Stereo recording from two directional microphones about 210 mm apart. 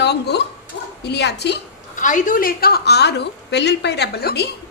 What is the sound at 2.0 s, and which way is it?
A woman's voice, 40° left (ahead or behind).